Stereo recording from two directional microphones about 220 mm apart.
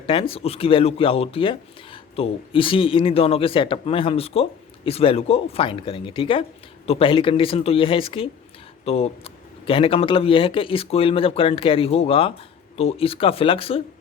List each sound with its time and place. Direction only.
0.1 s speech: 25° left (ahead or behind)